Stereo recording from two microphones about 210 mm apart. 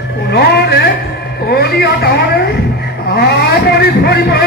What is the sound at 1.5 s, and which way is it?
A man's voice, 50° left (ahead or behind).